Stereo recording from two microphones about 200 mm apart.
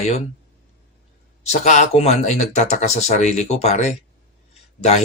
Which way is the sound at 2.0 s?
35° left (ahead or behind).